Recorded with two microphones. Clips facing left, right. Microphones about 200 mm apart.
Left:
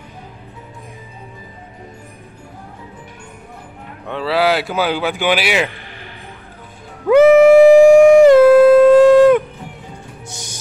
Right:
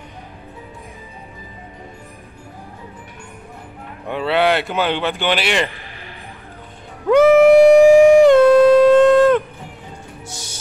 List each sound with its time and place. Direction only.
4.1 s a man's voice: centre (ahead or behind)
7.1 s music: 5° left (ahead or behind)